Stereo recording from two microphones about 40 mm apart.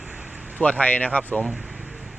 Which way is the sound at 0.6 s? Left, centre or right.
Left.